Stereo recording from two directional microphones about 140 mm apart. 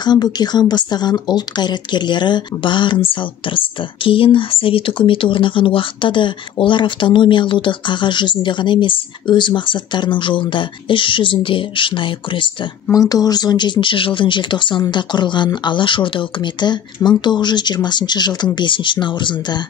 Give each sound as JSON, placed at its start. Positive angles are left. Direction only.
{"t": 0.0, "sound": "speech", "side_deg": 30}
{"t": 12.9, "sound": "speech", "side_deg": 25}